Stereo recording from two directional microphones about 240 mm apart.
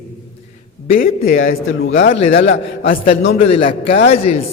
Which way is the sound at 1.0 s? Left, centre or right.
Left.